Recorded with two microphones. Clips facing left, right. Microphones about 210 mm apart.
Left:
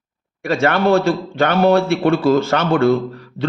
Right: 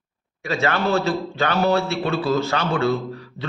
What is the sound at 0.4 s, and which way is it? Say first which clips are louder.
A man's voice: left 6 dB; 55° left (ahead or behind).